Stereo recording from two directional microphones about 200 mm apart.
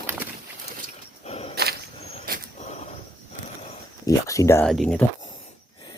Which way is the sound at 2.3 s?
45° right (ahead or behind).